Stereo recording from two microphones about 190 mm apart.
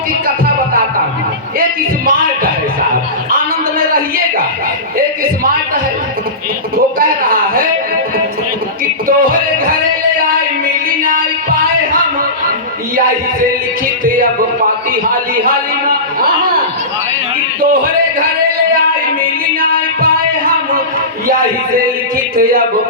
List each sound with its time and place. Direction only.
2.0 s music: 50° right (ahead or behind)
3.3 s a sound: 50° right (ahead or behind)
7.0 s a sound: 50° right (ahead or behind)
9.0 s music: 50° right (ahead or behind)
10.8 s a sound: 50° right (ahead or behind)
15.1 s a man's voice: 50° right (ahead or behind)
17.6 s a man's voice: 45° right (ahead or behind)
19.5 s music: 50° right (ahead or behind)
22.4 s a man's voice: 50° right (ahead or behind)